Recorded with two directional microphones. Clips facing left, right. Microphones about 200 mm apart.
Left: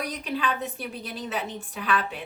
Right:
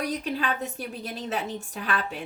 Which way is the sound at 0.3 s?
40° right (ahead or behind).